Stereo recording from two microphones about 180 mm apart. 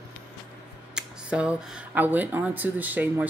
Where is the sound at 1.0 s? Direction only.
5° right (ahead or behind).